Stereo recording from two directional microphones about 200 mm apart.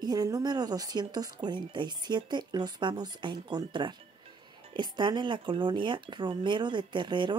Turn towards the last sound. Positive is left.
turn(degrees=-25)  # may be behind; listen again after turning